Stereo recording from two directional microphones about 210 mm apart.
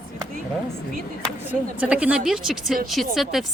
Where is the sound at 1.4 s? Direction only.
5° right (ahead or behind).